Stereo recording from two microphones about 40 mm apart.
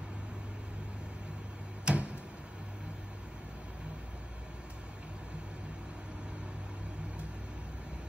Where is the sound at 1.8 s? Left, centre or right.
Right.